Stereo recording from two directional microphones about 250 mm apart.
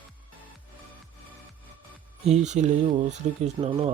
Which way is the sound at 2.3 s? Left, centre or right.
Right.